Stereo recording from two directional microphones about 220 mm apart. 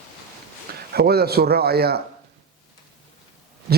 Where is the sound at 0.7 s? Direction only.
45° right (ahead or behind).